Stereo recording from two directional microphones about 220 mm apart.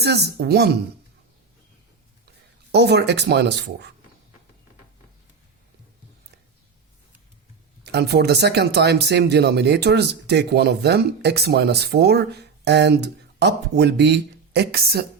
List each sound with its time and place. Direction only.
0.0 s speech: 50° right (ahead or behind)
2.7 s speech: 50° right (ahead or behind)
7.9 s speech: 50° right (ahead or behind)